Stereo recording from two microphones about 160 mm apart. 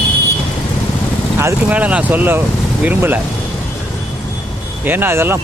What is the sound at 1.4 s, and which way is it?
Speech, 10° right (ahead or behind).